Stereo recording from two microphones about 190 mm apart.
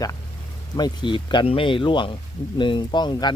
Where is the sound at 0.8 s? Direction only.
25° left (ahead or behind).